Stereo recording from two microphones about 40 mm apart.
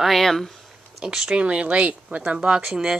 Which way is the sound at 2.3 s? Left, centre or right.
Right.